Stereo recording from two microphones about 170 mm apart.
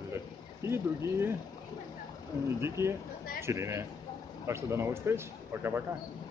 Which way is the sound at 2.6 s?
15° right (ahead or behind).